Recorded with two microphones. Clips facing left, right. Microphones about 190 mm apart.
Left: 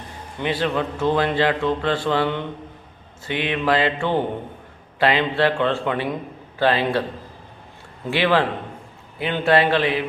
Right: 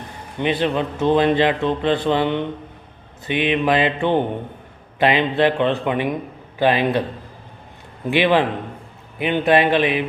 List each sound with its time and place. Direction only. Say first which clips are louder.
0.3 s a man's voice: right 3 dB; 20° right (ahead or behind)
8.0 s a man's voice: right 3 dB; 15° right (ahead or behind)